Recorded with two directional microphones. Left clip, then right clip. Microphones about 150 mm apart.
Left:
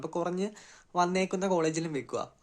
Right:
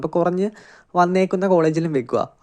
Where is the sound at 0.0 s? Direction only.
35° right (ahead or behind).